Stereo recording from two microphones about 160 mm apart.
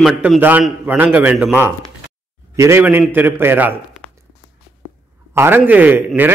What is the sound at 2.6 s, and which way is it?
A man's voice, 15° right (ahead or behind).